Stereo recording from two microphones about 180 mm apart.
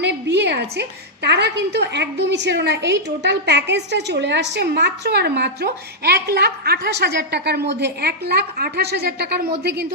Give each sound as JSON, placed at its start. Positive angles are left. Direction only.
{"t": 0.0, "sound": "a woman's voice", "side_deg": -70}